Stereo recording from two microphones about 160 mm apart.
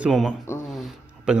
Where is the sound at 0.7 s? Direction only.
Centre (ahead or behind).